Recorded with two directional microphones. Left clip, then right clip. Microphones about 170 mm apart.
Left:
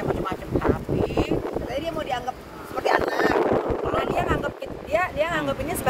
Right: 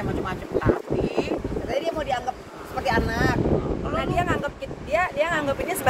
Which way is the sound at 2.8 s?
10° right (ahead or behind).